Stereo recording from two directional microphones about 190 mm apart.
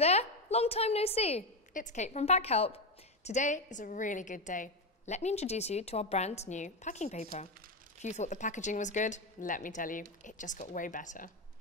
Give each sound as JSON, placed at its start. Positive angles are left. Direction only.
{"t": 0.0, "sound": "a woman's voice", "side_deg": 35}